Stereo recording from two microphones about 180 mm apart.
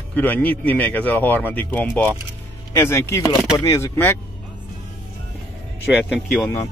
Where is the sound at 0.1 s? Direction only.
10° left (ahead or behind).